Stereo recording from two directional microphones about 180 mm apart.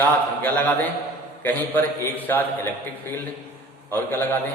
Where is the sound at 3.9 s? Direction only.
10° left (ahead or behind).